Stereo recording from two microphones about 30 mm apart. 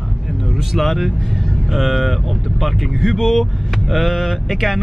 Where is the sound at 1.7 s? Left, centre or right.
Centre.